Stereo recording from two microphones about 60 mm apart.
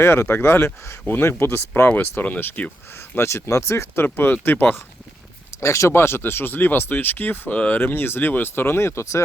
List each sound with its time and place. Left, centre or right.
0.0 s speech: left
2.2 s speech: left
3.2 s speech: left
3.9 s speech: left
5.5 s speech: left